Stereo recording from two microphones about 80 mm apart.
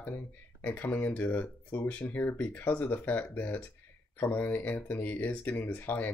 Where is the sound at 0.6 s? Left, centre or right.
Left.